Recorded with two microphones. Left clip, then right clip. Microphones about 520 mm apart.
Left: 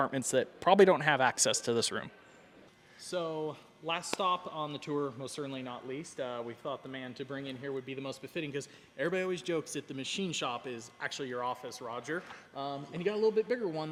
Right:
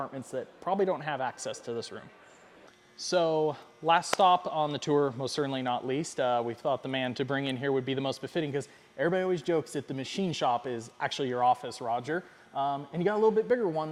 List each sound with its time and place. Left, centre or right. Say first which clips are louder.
0.0 s speech: left 6 dB; centre
3.0 s speech: right 9 dB; right